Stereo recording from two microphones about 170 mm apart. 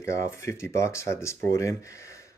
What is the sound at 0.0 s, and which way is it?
Speech, 15° left (ahead or behind).